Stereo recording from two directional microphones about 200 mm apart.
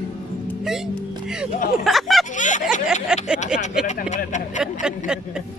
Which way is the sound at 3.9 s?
40° left (ahead or behind).